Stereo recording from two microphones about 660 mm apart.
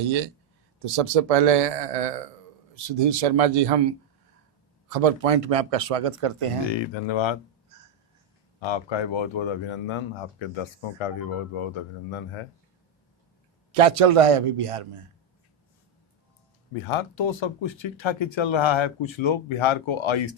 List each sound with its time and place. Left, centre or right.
0.8 s speech: right
4.9 s speech: right
6.7 s speech: left
8.6 s speech: left
13.7 s speech: right
16.8 s speech: left